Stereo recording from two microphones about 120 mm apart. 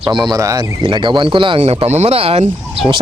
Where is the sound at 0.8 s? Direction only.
40° right (ahead or behind).